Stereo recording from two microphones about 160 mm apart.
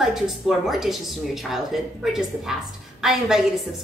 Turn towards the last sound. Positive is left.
turn(degrees=0)  # may be behind; listen again after turning